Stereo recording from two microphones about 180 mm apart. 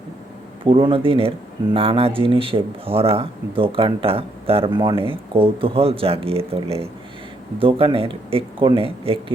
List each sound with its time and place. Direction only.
0.6 s speech: 30° right (ahead or behind)